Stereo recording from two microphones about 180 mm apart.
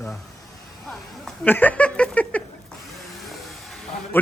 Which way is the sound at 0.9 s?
Centre (ahead or behind).